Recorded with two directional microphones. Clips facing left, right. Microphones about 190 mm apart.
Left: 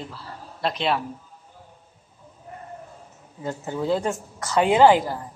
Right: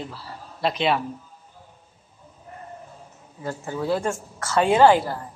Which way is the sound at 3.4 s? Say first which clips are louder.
Left 1 dB; 20° left (ahead or behind).